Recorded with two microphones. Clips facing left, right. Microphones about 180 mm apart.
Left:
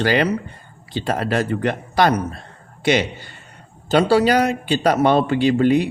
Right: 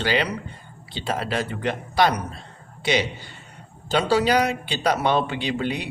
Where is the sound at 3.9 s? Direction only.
45° left (ahead or behind).